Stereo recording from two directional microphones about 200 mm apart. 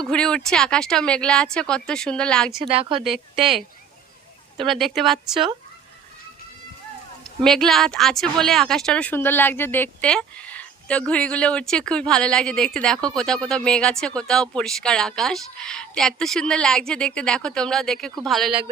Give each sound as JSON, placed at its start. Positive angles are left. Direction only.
{"t": 0.0, "sound": "a woman's voice", "side_deg": 5}
{"t": 2.6, "sound": "speech", "side_deg": -30}
{"t": 3.0, "sound": "a woman's voice", "side_deg": 0}
{"t": 4.6, "sound": "a woman's voice", "side_deg": 0}
{"t": 7.4, "sound": "a woman's voice", "side_deg": 0}